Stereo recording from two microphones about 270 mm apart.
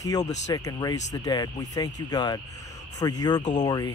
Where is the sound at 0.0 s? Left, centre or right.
Centre.